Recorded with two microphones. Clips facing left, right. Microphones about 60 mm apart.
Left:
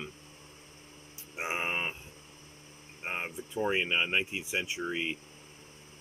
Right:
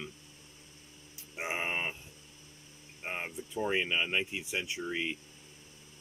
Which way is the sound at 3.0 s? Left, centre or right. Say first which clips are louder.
Left 2 dB; left.